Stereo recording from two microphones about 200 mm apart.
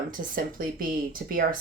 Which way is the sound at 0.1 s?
45° right (ahead or behind).